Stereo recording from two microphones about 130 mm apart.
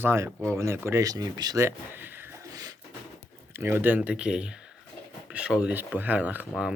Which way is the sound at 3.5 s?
20° right (ahead or behind).